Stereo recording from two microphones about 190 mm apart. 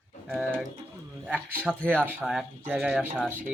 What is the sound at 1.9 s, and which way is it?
Speech, 10° right (ahead or behind).